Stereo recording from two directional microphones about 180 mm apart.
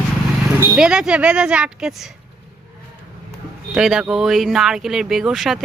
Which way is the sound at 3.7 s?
5° right (ahead or behind).